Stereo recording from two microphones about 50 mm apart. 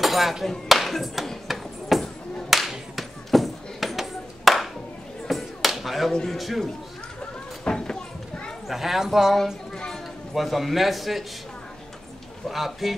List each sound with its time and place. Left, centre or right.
0.0 s a sound: centre
6.3 s a man's voice: centre
7.6 s a sound: centre
8.6 s a man's voice: centre
10.3 s a man's voice: centre
12.4 s a man's voice: centre